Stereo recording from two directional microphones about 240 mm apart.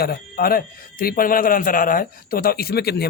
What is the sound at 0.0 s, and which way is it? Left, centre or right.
Speech, left.